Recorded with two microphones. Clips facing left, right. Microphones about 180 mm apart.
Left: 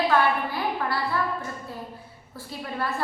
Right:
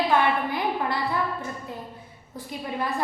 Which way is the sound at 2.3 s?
15° right (ahead or behind).